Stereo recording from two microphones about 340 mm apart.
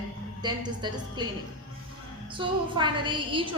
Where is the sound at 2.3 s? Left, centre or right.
Centre.